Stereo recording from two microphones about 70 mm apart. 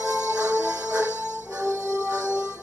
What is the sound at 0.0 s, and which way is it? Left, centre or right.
Music, right.